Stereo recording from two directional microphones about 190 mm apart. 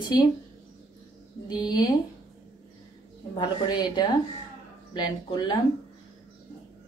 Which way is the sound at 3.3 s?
20° left (ahead or behind).